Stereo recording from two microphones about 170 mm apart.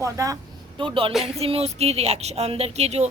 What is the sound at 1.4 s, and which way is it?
A woman's voice, 35° right (ahead or behind).